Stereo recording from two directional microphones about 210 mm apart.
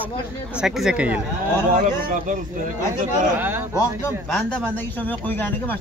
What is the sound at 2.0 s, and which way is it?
Speech, 40° right (ahead or behind).